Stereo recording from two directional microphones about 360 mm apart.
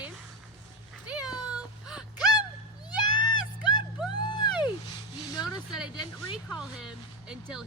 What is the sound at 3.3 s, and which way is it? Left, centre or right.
Music, centre.